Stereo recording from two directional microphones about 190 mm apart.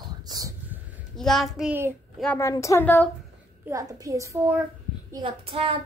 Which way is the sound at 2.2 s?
10° left (ahead or behind).